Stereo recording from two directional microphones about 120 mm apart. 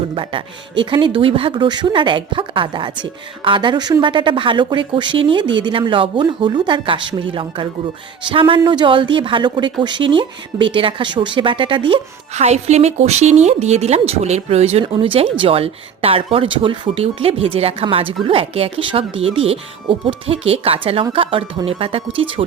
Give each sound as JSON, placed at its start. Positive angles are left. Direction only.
{"t": 0.1, "sound": "speech", "side_deg": -45}
{"t": 12.3, "sound": "speech", "side_deg": -65}
{"t": 14.9, "sound": "speech", "side_deg": -50}